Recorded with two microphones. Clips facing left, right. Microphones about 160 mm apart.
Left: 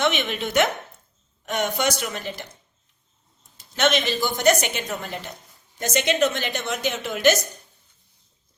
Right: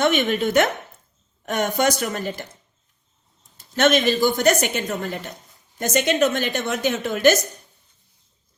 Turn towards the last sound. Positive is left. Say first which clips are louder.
# right 3 dB
turn(degrees=-50)  # may be behind; listen again after turning